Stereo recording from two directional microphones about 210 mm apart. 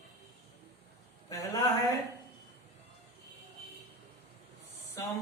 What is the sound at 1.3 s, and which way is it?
Speech, 15° left (ahead or behind).